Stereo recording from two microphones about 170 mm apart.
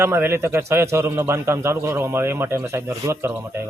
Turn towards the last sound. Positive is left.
turn(degrees=-15)  # may be behind; listen again after turning